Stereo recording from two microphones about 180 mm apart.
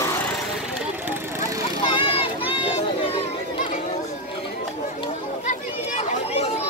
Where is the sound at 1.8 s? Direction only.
30° left (ahead or behind).